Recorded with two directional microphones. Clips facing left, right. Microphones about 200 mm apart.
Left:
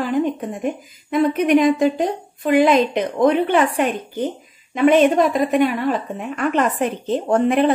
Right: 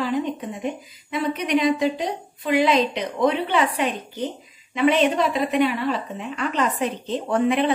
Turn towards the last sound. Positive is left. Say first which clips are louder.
# left 4 dB
turn(degrees=45)  # may be behind; listen again after turning